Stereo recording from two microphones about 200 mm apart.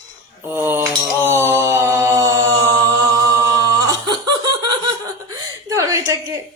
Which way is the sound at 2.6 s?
20° right (ahead or behind).